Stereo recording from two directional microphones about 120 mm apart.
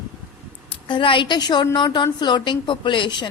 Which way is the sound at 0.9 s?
45° left (ahead or behind).